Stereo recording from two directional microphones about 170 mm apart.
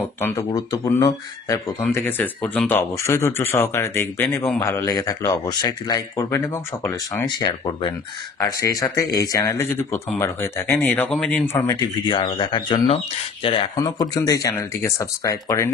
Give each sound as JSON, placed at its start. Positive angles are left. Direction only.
{"t": 0.2, "sound": "speech", "side_deg": 20}
{"t": 11.5, "sound": "speech", "side_deg": 20}
{"t": 12.1, "sound": "speech", "side_deg": 30}
{"t": 13.7, "sound": "speech", "side_deg": 20}